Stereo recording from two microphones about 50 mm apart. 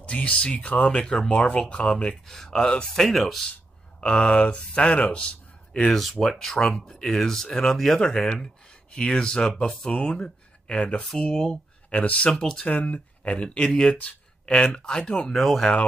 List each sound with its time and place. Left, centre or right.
0.0 s speech: left
1.0 s speech: centre
2.2 s speech: centre
4.0 s speech: left
5.9 s speech: centre
11.9 s speech: left
12.3 s speech: centre
12.6 s speech: left
13.7 s speech: centre
14.4 s a sound: centre
14.7 s speech: left
15.3 s speech: centre